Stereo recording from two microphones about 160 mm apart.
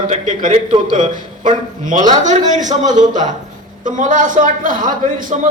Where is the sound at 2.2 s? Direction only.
50° right (ahead or behind).